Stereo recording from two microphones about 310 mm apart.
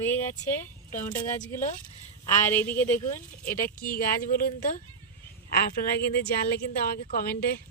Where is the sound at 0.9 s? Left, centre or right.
Left.